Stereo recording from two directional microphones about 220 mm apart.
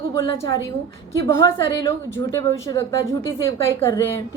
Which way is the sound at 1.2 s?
10° left (ahead or behind).